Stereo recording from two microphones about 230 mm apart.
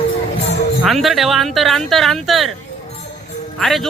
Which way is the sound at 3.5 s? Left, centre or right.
Centre.